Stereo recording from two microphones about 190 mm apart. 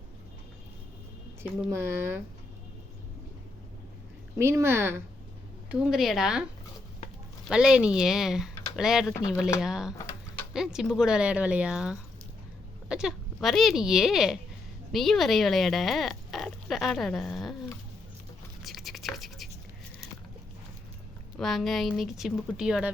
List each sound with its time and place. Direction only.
1.4 s speech: 15° right (ahead or behind)
4.4 s speech: 15° right (ahead or behind)
5.8 s speech: centre (ahead or behind)
7.5 s speech: 5° right (ahead or behind)
9.1 s speech: 15° left (ahead or behind)
9.6 s speech: 5° right (ahead or behind)
18.6 s scratch: centre (ahead or behind)
21.3 s speech: centre (ahead or behind)